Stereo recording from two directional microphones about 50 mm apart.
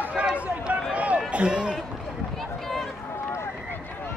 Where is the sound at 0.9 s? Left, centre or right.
Right.